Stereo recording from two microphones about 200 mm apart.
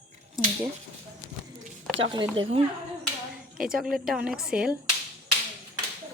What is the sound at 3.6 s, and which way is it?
Speech, 5° right (ahead or behind).